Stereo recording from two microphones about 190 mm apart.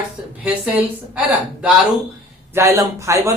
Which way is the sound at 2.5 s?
15° right (ahead or behind).